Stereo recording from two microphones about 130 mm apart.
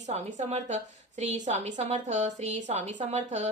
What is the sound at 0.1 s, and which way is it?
A woman's voice, 60° right (ahead or behind).